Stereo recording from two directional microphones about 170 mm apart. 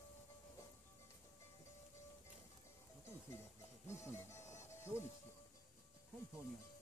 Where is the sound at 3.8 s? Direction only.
15° left (ahead or behind).